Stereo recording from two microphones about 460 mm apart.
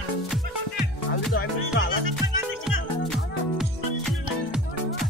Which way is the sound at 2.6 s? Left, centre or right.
Centre.